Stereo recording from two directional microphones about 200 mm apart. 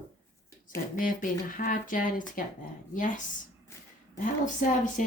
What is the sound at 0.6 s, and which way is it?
Speech, 45° left (ahead or behind).